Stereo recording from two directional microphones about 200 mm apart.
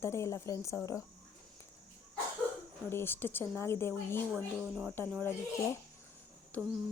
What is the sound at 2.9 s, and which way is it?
Speech, 10° left (ahead or behind).